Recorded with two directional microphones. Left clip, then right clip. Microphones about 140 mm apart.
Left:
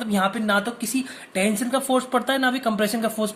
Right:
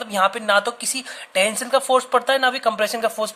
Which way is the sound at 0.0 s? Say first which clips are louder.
Right 4 dB; 45° right (ahead or behind).